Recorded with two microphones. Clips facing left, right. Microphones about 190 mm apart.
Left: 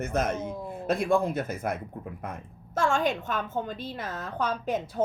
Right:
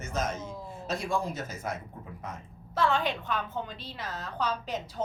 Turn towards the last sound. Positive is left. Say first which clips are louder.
# left 5 dB
turn(degrees=55)  # may be behind; listen again after turning